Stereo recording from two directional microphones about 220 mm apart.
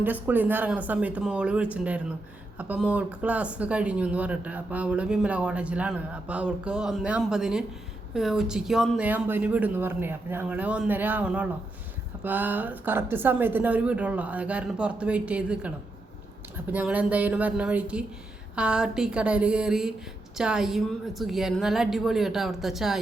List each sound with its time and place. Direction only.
0.0 s speech: 10° right (ahead or behind)
16.7 s speech: 5° right (ahead or behind)